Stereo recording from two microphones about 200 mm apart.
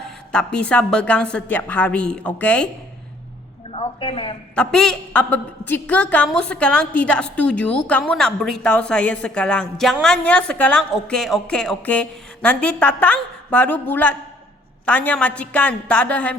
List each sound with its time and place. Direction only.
0.3 s a woman's voice: 5° left (ahead or behind)
3.7 s a woman's voice: 30° left (ahead or behind)
4.5 s a woman's voice: 5° left (ahead or behind)